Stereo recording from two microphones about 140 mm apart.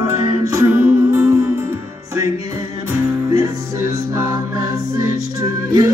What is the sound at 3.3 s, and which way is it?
Music, 20° right (ahead or behind).